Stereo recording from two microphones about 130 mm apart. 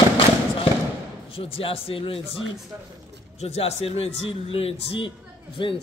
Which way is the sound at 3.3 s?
55° left (ahead or behind).